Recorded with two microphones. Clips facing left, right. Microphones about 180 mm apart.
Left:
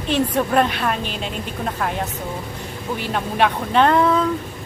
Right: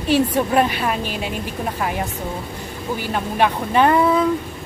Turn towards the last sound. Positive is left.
turn(degrees=-10)  # may be behind; listen again after turning